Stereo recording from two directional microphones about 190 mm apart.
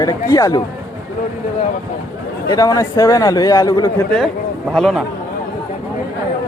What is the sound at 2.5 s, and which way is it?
A man's voice, 15° left (ahead or behind).